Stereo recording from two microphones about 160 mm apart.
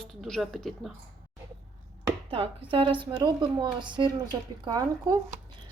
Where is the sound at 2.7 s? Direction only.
30° right (ahead or behind).